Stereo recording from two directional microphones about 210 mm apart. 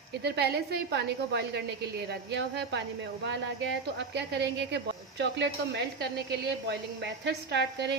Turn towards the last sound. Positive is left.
turn(degrees=-55)  # may be behind; listen again after turning